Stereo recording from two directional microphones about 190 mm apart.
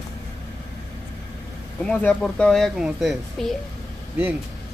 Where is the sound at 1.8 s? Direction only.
5° left (ahead or behind).